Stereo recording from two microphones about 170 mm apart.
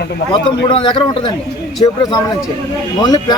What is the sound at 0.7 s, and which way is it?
Speech, 30° left (ahead or behind).